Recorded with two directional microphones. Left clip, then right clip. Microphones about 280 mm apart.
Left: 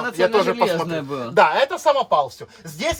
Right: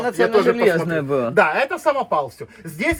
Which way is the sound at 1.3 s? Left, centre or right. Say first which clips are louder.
Left 3 dB; left.